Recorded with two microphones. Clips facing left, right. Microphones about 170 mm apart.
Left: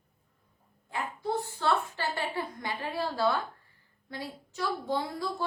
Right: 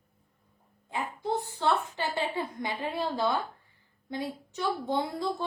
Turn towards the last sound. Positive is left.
turn(degrees=-20)  # may be behind; listen again after turning